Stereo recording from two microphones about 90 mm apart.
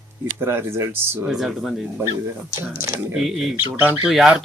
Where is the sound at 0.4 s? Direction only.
25° right (ahead or behind).